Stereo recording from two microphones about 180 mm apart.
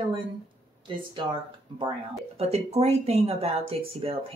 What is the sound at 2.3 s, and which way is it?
A woman's voice, 35° right (ahead or behind).